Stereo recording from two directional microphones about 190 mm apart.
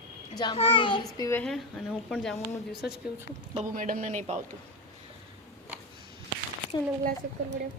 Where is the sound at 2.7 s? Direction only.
60° left (ahead or behind).